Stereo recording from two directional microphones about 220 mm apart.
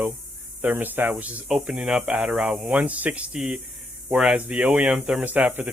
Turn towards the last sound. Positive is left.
turn(degrees=-10)  # may be behind; listen again after turning